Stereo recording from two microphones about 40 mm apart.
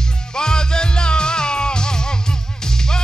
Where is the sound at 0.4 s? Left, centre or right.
Centre.